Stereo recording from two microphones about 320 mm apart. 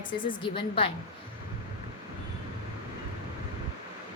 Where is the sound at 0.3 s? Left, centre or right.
Centre.